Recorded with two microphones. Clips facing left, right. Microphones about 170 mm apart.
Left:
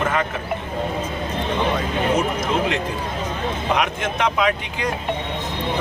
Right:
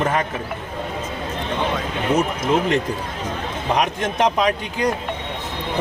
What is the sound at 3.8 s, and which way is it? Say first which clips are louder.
Speech: right 2 dB; 35° right (ahead or behind).